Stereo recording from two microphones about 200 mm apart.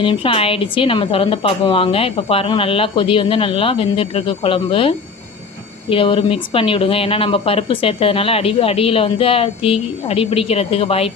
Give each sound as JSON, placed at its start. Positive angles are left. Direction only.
{"t": 0.0, "sound": "speech", "side_deg": 25}